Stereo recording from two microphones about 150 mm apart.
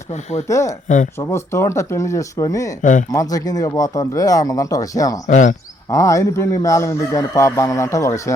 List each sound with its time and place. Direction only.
0.4 s speech: 20° left (ahead or behind)
0.9 s speech: 55° left (ahead or behind)
1.3 s speech: 20° left (ahead or behind)
5.3 s speech: 55° left (ahead or behind)
5.9 s speech: 20° left (ahead or behind)